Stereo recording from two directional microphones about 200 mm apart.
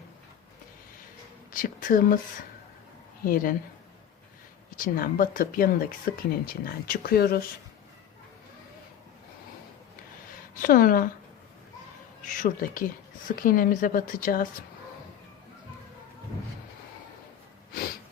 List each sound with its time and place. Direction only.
1.5 s speech: 45° left (ahead or behind)
3.2 s speech: 45° left (ahead or behind)
4.8 s speech: 45° left (ahead or behind)
10.6 s speech: 45° left (ahead or behind)
12.3 s speech: 40° left (ahead or behind)